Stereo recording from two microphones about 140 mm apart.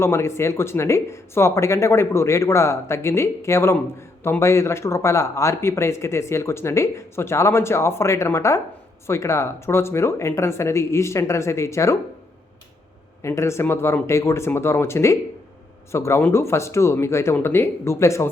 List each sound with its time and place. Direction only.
0.0 s speech: 20° left (ahead or behind)
13.2 s speech: 20° left (ahead or behind)